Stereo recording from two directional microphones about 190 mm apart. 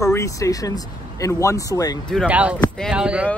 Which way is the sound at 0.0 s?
15° left (ahead or behind).